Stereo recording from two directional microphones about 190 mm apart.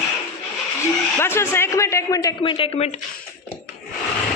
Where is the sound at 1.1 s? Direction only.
15° left (ahead or behind).